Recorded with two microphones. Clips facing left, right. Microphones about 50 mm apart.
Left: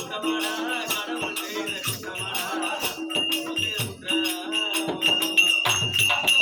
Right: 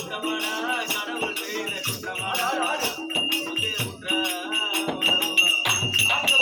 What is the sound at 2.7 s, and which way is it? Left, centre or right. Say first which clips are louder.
Music: right 3 dB; right.